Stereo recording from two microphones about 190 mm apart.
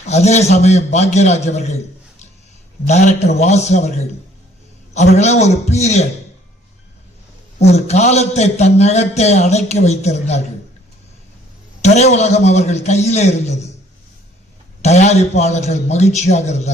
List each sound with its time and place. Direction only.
0.0 s a man's voice: 35° left (ahead or behind)
2.8 s a man's voice: 35° left (ahead or behind)
7.6 s a man's voice: 35° left (ahead or behind)
11.8 s a man's voice: 35° left (ahead or behind)
14.8 s a man's voice: 35° left (ahead or behind)